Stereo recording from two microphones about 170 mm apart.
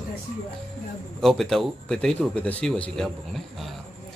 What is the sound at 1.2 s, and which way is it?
A man's voice, centre (ahead or behind).